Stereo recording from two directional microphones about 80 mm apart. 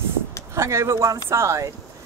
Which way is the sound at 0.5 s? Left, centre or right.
Right.